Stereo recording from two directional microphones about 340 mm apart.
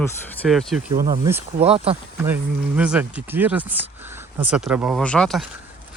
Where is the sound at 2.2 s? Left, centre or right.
Centre.